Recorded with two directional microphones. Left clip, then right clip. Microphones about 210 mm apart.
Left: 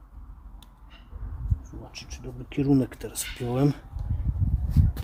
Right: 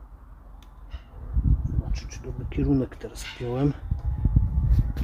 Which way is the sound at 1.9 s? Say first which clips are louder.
Right 1 dB; 35° left (ahead or behind).